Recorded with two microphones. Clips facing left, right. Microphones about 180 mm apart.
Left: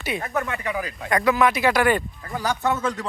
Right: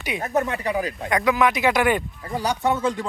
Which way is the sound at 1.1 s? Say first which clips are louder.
Left 1 dB; 15° right (ahead or behind).